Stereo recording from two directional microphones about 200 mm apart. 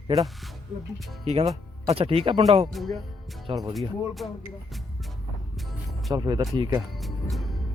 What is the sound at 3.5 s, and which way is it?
Speech, 25° right (ahead or behind).